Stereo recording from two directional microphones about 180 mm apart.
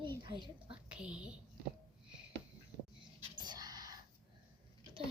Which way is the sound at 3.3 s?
25° right (ahead or behind).